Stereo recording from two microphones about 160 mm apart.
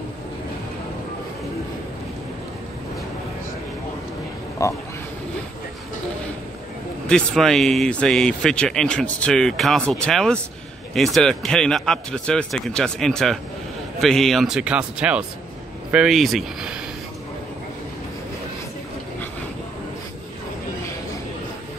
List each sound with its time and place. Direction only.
4.6 s speech: 20° left (ahead or behind)
7.1 s speech: 5° left (ahead or behind)